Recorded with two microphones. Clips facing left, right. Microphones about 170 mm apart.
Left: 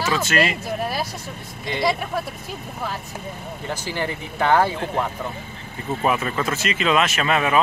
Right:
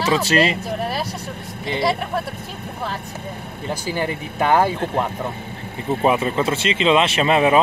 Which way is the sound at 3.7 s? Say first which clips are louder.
Right 3 dB; 15° right (ahead or behind).